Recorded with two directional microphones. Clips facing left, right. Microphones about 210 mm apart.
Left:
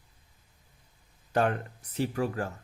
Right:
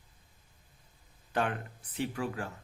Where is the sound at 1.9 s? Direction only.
40° left (ahead or behind).